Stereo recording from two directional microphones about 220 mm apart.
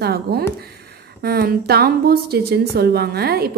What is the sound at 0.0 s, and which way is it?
A woman's voice, 45° right (ahead or behind).